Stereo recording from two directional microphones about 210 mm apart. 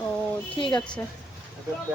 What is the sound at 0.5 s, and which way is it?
Speech, 20° left (ahead or behind).